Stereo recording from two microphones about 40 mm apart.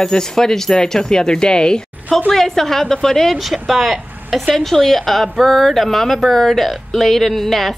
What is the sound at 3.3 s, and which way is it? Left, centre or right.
Speech, centre.